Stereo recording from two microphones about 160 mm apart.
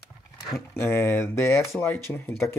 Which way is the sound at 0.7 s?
15° left (ahead or behind).